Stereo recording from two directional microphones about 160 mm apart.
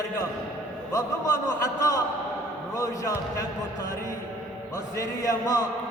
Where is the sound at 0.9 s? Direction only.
20° left (ahead or behind).